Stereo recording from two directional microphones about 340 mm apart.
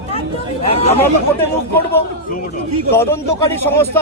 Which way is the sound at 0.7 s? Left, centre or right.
Centre.